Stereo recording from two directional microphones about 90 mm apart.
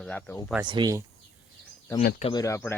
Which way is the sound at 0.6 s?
55° right (ahead or behind).